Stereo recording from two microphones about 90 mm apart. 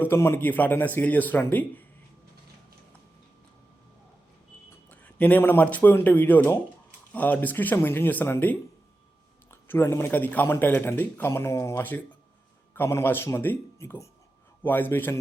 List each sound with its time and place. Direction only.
0.0 s speech: 25° left (ahead or behind)
4.9 s speech: 20° left (ahead or behind)
11.8 s speech: 20° left (ahead or behind)